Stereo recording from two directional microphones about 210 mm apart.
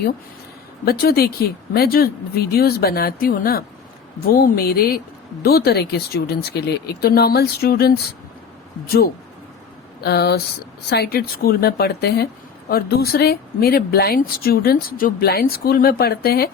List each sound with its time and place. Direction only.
0.9 s speech: 45° left (ahead or behind)